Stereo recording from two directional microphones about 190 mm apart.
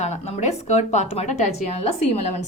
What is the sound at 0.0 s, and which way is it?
A woman's voice, 35° left (ahead or behind).